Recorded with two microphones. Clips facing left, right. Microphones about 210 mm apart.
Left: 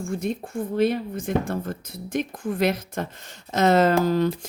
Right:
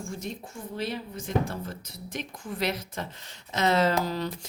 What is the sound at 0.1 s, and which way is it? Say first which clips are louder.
Speech: left 9 dB; 60° left (ahead or behind).